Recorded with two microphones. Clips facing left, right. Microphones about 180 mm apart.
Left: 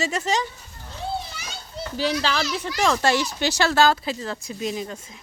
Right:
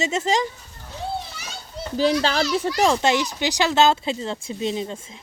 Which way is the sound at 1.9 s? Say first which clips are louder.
Right 4 dB; 40° right (ahead or behind).